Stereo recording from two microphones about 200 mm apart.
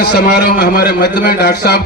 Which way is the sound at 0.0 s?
55° left (ahead or behind).